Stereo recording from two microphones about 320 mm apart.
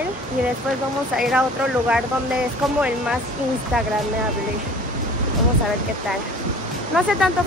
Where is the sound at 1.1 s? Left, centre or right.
Centre.